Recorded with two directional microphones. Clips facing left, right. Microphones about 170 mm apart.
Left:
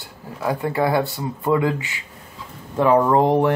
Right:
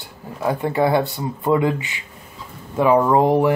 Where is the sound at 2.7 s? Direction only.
5° right (ahead or behind).